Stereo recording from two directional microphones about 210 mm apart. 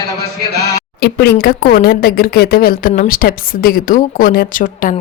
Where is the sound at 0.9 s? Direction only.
50° left (ahead or behind).